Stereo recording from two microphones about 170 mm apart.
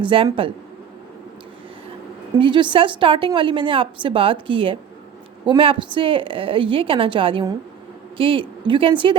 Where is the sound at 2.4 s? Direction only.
30° right (ahead or behind).